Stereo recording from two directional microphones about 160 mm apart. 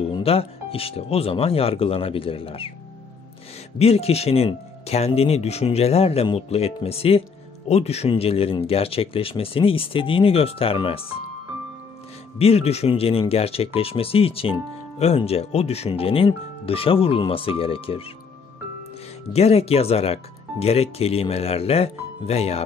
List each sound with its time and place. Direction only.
0.1 s speech: 35° left (ahead or behind)
3.7 s speech: 40° left (ahead or behind)
12.4 s speech: 40° left (ahead or behind)
19.3 s speech: 40° left (ahead or behind)